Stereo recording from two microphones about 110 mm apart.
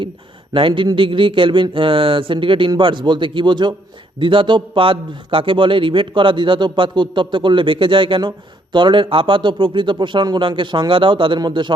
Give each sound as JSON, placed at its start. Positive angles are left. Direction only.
{"t": 0.5, "sound": "a man's voice", "side_deg": -50}